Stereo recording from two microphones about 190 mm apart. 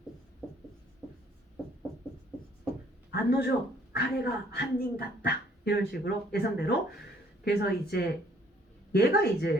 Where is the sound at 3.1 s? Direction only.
60° left (ahead or behind).